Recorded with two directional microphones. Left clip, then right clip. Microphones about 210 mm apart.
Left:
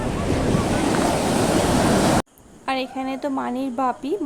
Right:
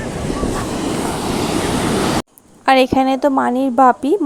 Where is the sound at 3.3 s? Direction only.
25° right (ahead or behind).